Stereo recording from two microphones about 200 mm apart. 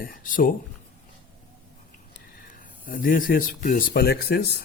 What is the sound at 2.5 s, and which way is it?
Speech, 45° left (ahead or behind).